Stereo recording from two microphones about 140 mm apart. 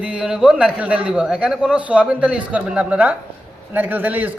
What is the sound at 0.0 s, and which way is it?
A man's voice, 5° right (ahead or behind).